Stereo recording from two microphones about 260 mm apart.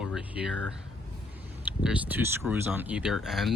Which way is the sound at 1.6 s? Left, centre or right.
Centre.